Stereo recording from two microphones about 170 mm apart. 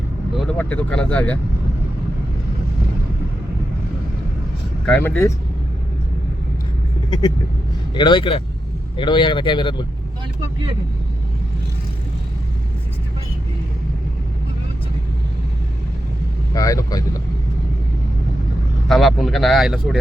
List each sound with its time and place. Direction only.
0.5 s speech: 10° left (ahead or behind)
4.9 s speech: 10° left (ahead or behind)
7.1 s speech: 25° left (ahead or behind)
16.6 s speech: 20° left (ahead or behind)
18.9 s speech: centre (ahead or behind)